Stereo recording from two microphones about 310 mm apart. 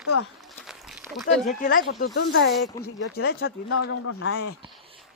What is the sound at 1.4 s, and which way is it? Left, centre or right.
Speech, left.